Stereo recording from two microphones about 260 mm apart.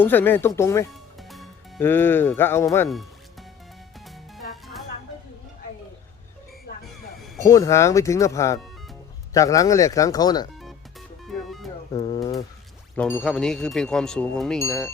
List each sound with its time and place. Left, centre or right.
0.0 s speech: centre
7.4 s speech: centre
11.3 s music: centre
11.9 s pigeon: centre
13.0 s wind chime: centre